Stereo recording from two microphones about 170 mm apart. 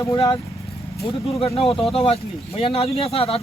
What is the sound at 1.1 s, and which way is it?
Speech, 35° left (ahead or behind).